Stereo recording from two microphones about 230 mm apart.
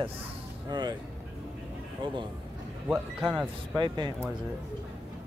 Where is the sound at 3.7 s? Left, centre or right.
Centre.